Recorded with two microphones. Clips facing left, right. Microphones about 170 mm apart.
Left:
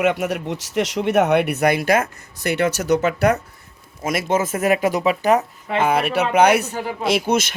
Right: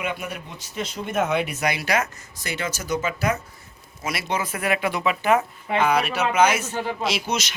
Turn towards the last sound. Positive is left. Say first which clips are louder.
# left 7 dB
turn(degrees=55)  # may be behind; listen again after turning